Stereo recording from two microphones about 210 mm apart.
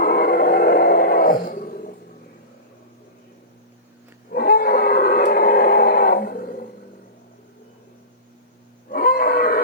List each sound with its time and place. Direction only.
0.0 s roar: 45° left (ahead or behind)
4.3 s a sound: 45° left (ahead or behind)
8.9 s wild animals: 45° left (ahead or behind)